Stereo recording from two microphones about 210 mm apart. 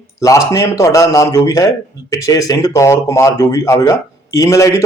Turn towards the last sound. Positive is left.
turn(degrees=15)  # may be behind; listen again after turning